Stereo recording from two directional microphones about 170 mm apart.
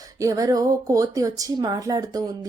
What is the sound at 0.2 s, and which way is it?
A woman's voice, 20° right (ahead or behind).